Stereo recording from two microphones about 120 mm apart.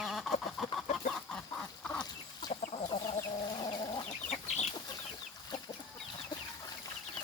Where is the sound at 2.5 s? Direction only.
70° left (ahead or behind).